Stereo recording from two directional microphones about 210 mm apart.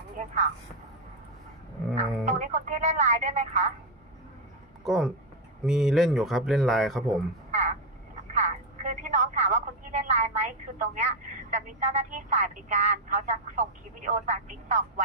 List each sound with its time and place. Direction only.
0.2 s speech: 35° right (ahead or behind)
2.0 s speech: 35° right (ahead or behind)
4.8 s speech: centre (ahead or behind)
8.3 s speech: 35° right (ahead or behind)